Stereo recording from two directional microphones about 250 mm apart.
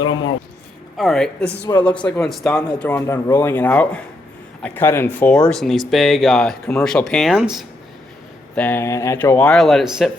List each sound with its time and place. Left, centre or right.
0.0 s a man's voice: centre
0.9 s a man's voice: centre